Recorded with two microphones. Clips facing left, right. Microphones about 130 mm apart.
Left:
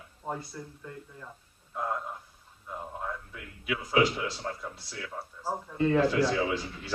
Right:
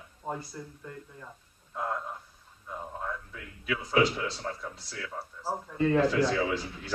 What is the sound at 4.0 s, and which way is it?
Speech, centre (ahead or behind).